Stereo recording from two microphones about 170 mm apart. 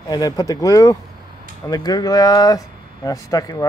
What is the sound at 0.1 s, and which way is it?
Speech, 20° left (ahead or behind).